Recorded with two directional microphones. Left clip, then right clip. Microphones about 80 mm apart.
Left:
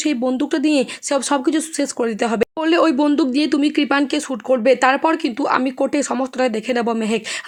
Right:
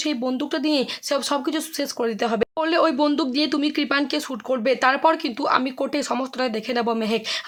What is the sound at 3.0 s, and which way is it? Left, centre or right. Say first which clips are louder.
Speech: left 4 dB; left.